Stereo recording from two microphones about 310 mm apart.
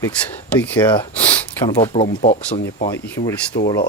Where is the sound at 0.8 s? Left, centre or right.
Centre.